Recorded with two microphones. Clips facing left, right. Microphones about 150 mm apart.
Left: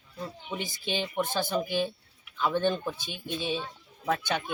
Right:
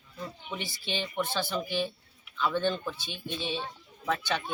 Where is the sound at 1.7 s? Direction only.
50° left (ahead or behind).